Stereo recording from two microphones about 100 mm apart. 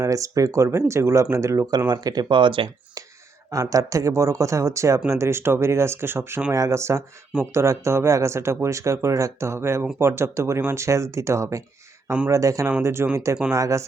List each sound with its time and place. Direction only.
0.0 s speech: 35° right (ahead or behind); by 2.6 s 55° right (ahead or behind)
3.5 s speech: 35° right (ahead or behind)